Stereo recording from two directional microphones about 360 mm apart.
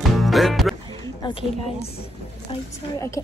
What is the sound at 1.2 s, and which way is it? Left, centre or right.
Speech, centre.